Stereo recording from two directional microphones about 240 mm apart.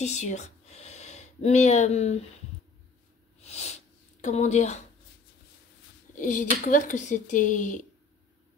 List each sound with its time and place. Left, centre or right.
0.0 s speech: left
3.3 s a sound: left
4.2 s a woman's voice: left
6.1 s speech: left